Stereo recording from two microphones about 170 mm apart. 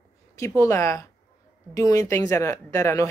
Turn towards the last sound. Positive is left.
turn(degrees=20)  # may be behind; listen again after turning